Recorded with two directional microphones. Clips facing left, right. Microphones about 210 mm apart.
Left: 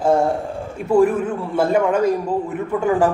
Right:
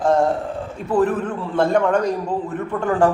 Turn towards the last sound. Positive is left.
turn(degrees=10)  # may be behind; listen again after turning